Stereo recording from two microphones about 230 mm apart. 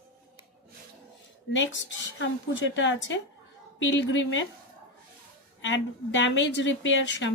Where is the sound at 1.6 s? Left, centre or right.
Left.